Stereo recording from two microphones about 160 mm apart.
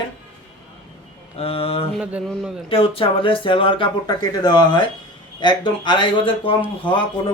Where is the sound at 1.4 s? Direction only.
35° left (ahead or behind).